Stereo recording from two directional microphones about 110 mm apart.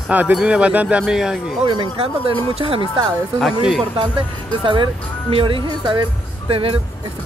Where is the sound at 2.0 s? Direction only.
60° right (ahead or behind).